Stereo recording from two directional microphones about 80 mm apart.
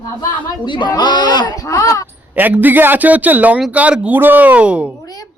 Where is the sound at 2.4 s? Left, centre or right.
Right.